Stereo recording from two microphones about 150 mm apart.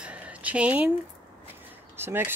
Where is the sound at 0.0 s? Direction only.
10° right (ahead or behind).